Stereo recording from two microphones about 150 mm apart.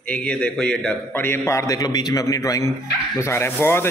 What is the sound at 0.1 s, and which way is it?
A man's voice, 10° left (ahead or behind).